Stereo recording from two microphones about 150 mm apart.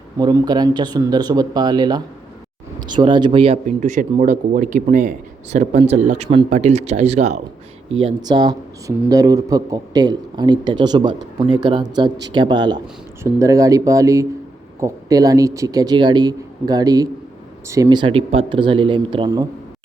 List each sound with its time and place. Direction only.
0.2 s a man's voice: 25° right (ahead or behind)
3.8 s speech: 55° right (ahead or behind)
5.5 s speech: 50° right (ahead or behind)
7.9 s a man's voice: 40° right (ahead or behind)